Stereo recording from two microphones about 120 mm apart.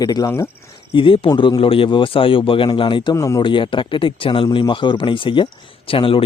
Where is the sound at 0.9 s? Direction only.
45° left (ahead or behind).